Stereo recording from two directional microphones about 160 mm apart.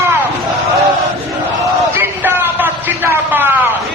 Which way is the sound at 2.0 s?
15° right (ahead or behind).